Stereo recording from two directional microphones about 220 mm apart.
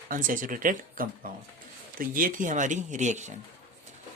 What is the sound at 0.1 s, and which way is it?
Speech, 40° right (ahead or behind).